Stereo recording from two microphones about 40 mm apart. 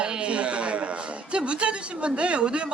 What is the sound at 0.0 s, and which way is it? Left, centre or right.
A man's voice, right.